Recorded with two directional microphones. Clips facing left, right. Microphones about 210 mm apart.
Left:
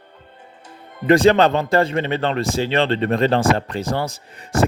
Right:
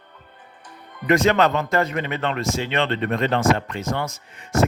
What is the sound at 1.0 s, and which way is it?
Speech, 30° left (ahead or behind).